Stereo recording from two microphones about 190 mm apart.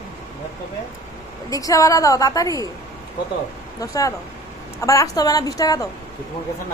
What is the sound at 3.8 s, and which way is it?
A woman's voice, 20° left (ahead or behind).